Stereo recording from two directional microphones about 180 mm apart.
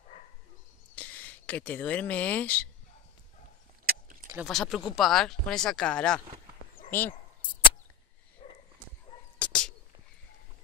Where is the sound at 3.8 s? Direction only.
55° right (ahead or behind).